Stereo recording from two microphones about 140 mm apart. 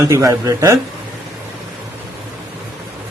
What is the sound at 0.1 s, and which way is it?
Speech, 25° right (ahead or behind).